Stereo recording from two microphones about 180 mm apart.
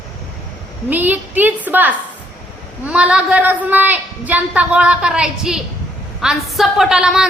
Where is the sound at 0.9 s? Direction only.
10° right (ahead or behind).